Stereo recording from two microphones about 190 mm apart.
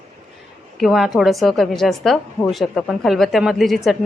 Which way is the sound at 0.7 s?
Centre (ahead or behind).